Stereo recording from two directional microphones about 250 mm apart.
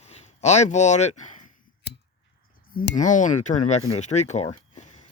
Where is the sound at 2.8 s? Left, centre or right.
Left.